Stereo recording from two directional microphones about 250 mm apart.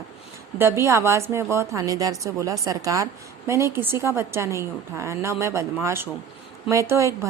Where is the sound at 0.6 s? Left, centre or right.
Centre.